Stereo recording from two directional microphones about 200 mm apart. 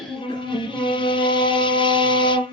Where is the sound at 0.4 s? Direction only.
25° left (ahead or behind).